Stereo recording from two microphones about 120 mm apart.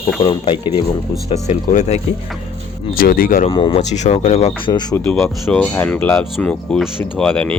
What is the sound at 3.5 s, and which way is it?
Speech, 45° left (ahead or behind).